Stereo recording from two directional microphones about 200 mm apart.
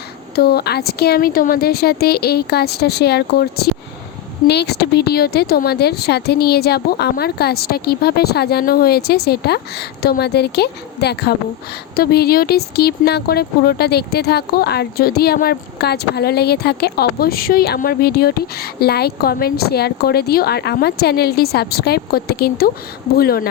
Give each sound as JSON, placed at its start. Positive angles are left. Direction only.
{"t": 0.3, "sound": "speech", "side_deg": 50}